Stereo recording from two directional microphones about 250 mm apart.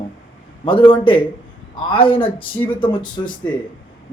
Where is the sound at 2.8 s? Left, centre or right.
Centre.